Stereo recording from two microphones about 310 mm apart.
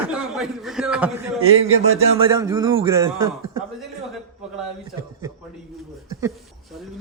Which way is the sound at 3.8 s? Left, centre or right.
Centre.